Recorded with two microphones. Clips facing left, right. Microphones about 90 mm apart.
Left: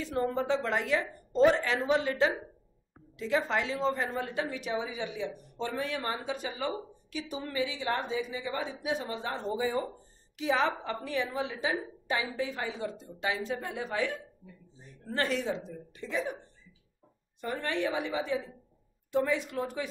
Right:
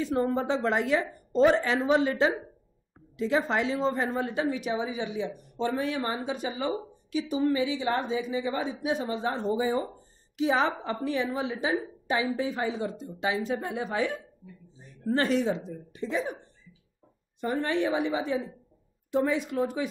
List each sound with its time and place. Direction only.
0.0 s a woman's voice: 20° right (ahead or behind)
15.1 s a woman's voice: 25° right (ahead or behind)
17.4 s a woman's voice: 25° right (ahead or behind)